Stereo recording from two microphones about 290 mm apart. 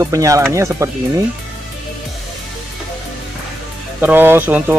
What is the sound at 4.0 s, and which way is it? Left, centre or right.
Speech, centre.